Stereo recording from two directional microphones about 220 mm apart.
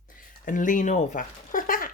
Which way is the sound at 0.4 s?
35° left (ahead or behind).